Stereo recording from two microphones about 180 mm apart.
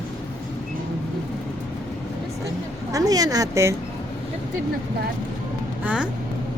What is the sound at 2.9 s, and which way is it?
Speech, 20° right (ahead or behind).